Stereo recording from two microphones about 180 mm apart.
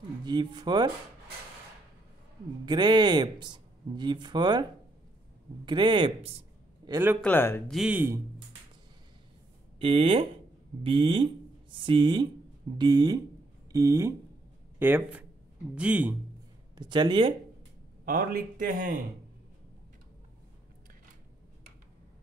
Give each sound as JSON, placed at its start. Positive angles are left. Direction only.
{"t": 0.2, "sound": "speech", "side_deg": -25}
{"t": 2.6, "sound": "speech", "side_deg": -25}
{"t": 5.7, "sound": "speech", "side_deg": -25}
{"t": 6.9, "sound": "speech", "side_deg": -10}
{"t": 7.2, "sound": "speech", "side_deg": 10}
{"t": 7.7, "sound": "speech", "side_deg": -5}
{"t": 9.8, "sound": "speech", "side_deg": -30}
{"t": 16.7, "sound": "speech", "side_deg": -25}
{"t": 18.0, "sound": "speech", "side_deg": -50}